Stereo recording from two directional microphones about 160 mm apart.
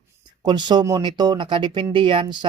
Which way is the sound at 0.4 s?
30° right (ahead or behind).